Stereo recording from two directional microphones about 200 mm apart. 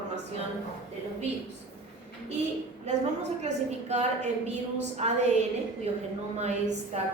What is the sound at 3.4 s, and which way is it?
A woman's voice, 35° right (ahead or behind).